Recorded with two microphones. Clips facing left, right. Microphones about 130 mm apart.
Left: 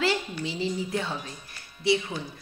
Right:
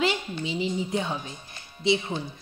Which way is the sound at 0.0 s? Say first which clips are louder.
Even; 20° right (ahead or behind).